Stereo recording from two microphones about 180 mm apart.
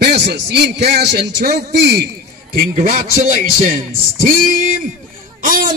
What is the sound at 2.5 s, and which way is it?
A man's voice, 55° right (ahead or behind).